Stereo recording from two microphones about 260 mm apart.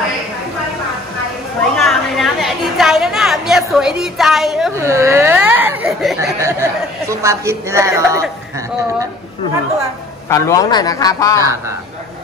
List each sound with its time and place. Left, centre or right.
1.8 s chatter: centre
6.4 s speech: centre
10.2 s a man's voice: centre